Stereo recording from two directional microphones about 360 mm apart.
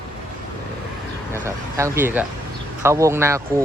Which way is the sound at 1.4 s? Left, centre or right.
Centre.